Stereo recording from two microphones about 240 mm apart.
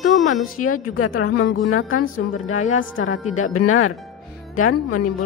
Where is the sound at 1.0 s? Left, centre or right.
Left.